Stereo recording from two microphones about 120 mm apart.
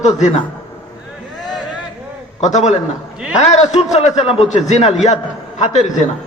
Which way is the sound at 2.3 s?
75° left (ahead or behind).